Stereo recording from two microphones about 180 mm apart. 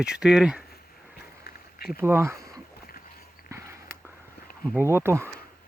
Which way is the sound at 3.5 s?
15° right (ahead or behind).